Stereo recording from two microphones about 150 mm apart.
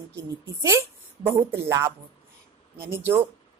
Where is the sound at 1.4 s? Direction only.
15° right (ahead or behind).